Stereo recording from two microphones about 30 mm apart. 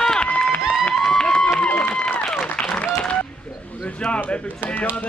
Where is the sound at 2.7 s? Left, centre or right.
Left.